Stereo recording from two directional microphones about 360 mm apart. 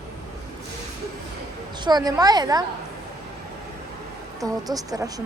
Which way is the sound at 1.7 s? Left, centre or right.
Centre.